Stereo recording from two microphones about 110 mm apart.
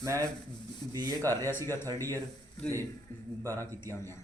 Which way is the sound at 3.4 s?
30° right (ahead or behind).